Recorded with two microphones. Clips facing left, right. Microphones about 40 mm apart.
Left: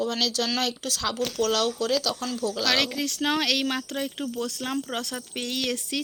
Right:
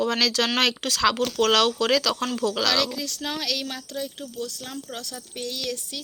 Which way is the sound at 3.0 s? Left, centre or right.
Left.